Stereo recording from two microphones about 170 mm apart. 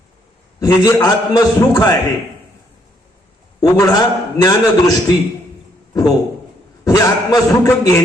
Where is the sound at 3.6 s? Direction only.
20° left (ahead or behind).